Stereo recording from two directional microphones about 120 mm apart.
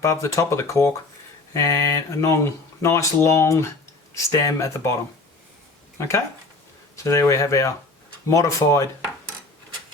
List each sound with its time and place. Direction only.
0.0 s speech: 25° left (ahead or behind)
6.0 s speech: 25° left (ahead or behind)